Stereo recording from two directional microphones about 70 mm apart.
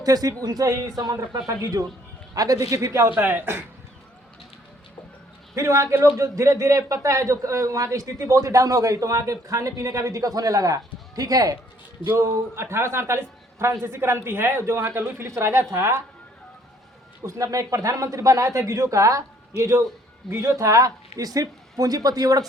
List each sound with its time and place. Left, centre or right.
0.0 s a man's voice: right
3.1 s speech: right
5.5 s a man's voice: right
12.0 s a man's voice: right
17.2 s a man's voice: right